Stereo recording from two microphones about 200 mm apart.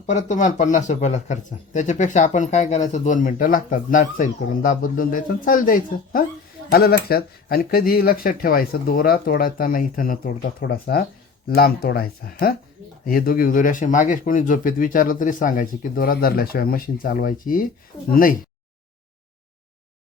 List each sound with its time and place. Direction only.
0.0 s speech: 35° left (ahead or behind)